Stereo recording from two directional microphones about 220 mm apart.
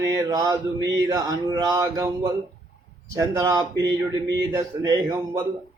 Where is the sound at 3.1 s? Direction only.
15° right (ahead or behind).